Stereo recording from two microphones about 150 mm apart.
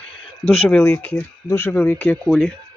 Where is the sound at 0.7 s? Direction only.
15° left (ahead or behind).